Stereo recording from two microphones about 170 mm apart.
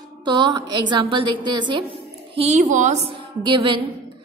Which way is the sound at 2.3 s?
40° right (ahead or behind).